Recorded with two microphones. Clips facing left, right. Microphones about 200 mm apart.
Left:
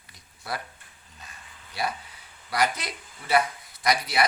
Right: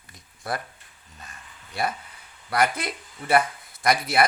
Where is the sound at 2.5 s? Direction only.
55° right (ahead or behind).